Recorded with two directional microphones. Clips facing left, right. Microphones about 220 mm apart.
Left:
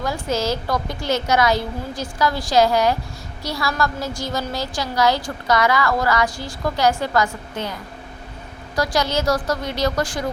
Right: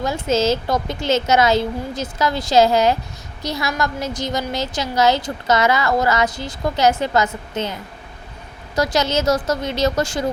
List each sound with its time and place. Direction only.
0.0 s a woman's voice: 25° right (ahead or behind)